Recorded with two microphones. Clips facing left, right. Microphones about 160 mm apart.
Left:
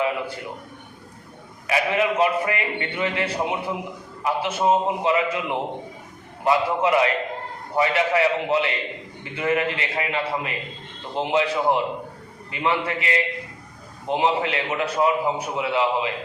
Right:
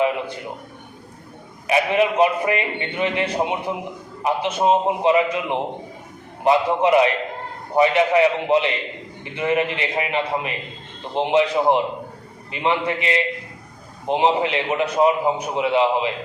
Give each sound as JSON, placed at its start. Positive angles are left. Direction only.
{"t": 1.6, "sound": "a man's voice", "side_deg": -20}